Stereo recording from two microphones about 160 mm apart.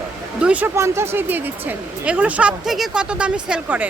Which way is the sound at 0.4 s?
10° right (ahead or behind).